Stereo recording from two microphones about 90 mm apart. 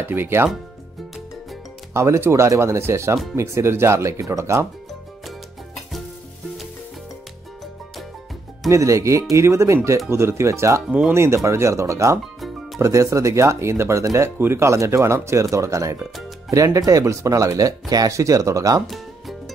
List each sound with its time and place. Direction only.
0.0 s speech: 25° right (ahead or behind)
2.0 s speech: 30° right (ahead or behind)
8.6 s speech: 35° right (ahead or behind)
10.9 s speech: 15° right (ahead or behind)
11.1 s speech: 30° right (ahead or behind)
12.4 s music: centre (ahead or behind)
12.8 s speech: 35° right (ahead or behind)
18.9 s music: centre (ahead or behind)